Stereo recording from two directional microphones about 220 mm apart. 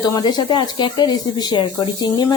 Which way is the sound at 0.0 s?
20° left (ahead or behind).